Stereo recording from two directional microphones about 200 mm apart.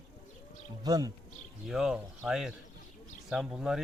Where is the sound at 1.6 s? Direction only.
Centre (ahead or behind).